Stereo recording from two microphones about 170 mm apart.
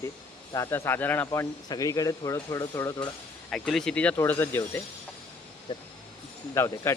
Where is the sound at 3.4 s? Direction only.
5° left (ahead or behind).